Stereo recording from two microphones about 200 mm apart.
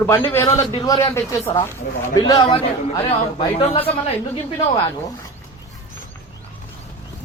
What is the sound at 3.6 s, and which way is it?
Speech, 30° left (ahead or behind).